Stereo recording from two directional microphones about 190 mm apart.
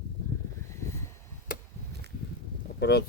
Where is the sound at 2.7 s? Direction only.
60° left (ahead or behind).